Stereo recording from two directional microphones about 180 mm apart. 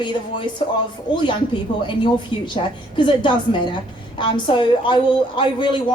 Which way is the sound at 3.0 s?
25° left (ahead or behind).